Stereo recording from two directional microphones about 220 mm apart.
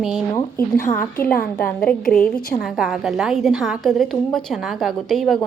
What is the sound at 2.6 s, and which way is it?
A woman's voice, centre (ahead or behind).